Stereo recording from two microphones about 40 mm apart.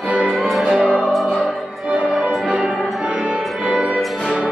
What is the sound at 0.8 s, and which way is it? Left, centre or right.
Music, right.